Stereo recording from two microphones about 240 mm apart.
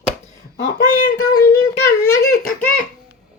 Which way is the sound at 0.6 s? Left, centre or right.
Left.